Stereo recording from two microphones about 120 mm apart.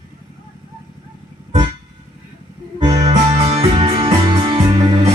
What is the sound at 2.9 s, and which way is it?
Music, 70° right (ahead or behind).